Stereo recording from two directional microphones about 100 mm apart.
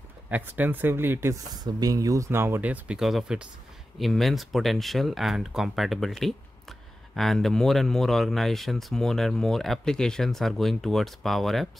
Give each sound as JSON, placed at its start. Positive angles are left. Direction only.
{"t": 0.3, "sound": "speech", "side_deg": -20}
{"t": 1.3, "sound": "speech", "side_deg": -35}
{"t": 3.0, "sound": "speech", "side_deg": -5}